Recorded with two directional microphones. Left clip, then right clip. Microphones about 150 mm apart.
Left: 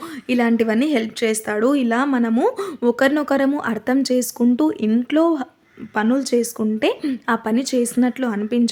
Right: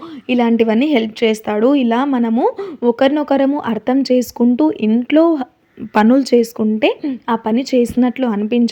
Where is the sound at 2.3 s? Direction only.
5° right (ahead or behind).